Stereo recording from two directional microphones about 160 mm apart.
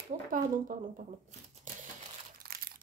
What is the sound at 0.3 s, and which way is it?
Speech, 55° right (ahead or behind).